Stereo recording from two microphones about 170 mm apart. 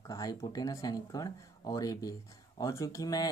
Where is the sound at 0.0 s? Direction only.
20° left (ahead or behind).